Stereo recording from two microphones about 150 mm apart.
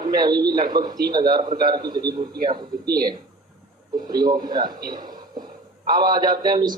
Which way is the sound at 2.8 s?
90° right.